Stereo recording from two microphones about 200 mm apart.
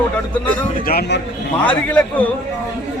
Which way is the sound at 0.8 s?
50° left (ahead or behind).